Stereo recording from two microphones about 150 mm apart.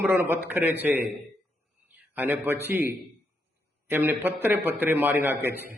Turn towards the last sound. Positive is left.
turn(degrees=-15)  # may be behind; listen again after turning